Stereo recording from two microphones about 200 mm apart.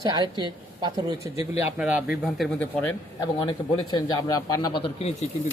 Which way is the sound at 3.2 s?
25° left (ahead or behind).